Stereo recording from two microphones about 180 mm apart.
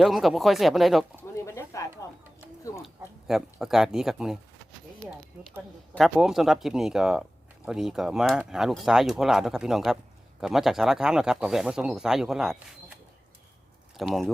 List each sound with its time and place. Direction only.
0.0 s speech: centre (ahead or behind)
1.5 s a sound: 15° left (ahead or behind)
3.2 s speech: centre (ahead or behind)
13.9 s speech: centre (ahead or behind)